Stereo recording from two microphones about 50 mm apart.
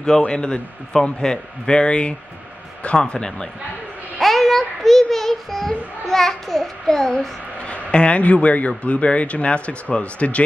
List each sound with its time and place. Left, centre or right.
0.3 s a man's voice: centre
4.2 s a child's voice: centre
7.6 s a man's voice: left